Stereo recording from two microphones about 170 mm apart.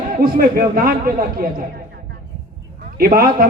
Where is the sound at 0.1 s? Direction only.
55° right (ahead or behind).